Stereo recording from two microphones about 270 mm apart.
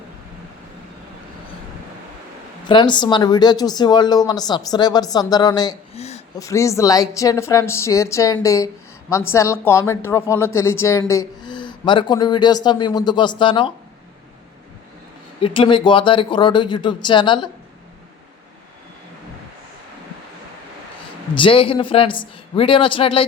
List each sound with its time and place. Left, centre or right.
2.6 s a woman's voice: centre
6.4 s a woman's voice: centre
15.4 s a woman's voice: centre
21.3 s a man's voice: centre